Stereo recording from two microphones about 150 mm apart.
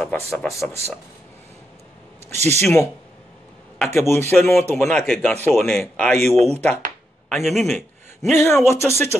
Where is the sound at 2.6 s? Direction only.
15° left (ahead or behind).